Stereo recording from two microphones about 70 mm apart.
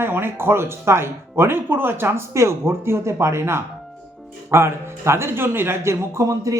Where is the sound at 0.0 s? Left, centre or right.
Right.